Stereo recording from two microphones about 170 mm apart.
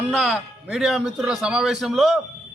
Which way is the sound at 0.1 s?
Centre (ahead or behind).